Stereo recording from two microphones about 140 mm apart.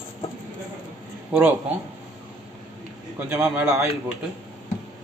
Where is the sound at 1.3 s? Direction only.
10° right (ahead or behind).